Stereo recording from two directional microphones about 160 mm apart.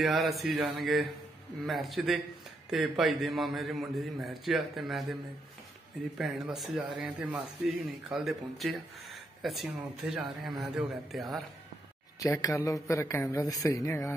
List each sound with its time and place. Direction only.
0.0 s speech: centre (ahead or behind)
6.1 s speech: centre (ahead or behind)
12.2 s speech: 20° left (ahead or behind)